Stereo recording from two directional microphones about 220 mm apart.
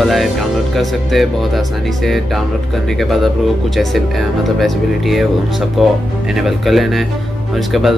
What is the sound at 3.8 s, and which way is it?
Speech, centre (ahead or behind).